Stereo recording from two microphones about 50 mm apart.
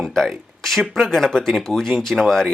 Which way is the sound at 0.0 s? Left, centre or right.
Centre.